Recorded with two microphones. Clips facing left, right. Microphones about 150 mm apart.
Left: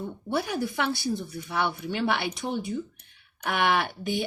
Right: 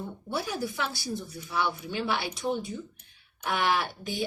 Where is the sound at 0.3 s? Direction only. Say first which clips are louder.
Left 4 dB; 60° left (ahead or behind).